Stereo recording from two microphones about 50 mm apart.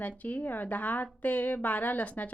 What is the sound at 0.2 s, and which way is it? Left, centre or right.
A woman's voice, left.